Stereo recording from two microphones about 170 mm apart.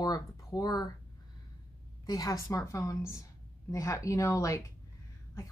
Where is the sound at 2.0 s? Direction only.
20° left (ahead or behind).